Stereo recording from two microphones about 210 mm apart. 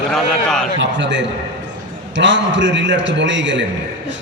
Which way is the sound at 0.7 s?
60° right (ahead or behind).